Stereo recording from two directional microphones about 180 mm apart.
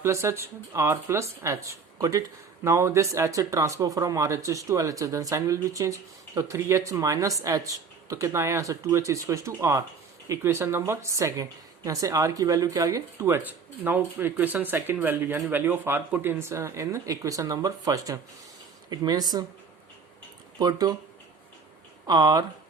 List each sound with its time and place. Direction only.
0.0 s speech: 15° right (ahead or behind)
20.6 s speech: 20° right (ahead or behind)
22.0 s speech: 20° right (ahead or behind)